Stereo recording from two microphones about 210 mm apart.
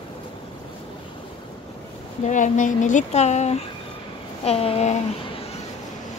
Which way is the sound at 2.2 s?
35° left (ahead or behind).